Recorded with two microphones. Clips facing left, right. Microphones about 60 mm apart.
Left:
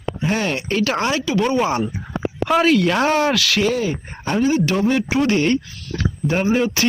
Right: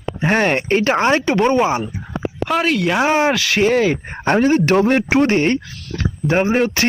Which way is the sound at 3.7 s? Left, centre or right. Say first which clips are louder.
Right 6 dB; right.